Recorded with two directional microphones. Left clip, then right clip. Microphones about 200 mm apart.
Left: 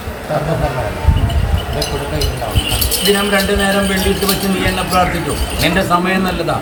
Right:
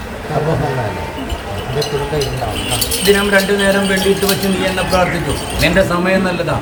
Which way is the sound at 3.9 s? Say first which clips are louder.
Right 2 dB; 10° right (ahead or behind).